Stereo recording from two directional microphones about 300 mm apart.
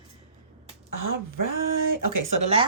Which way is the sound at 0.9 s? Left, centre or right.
Right.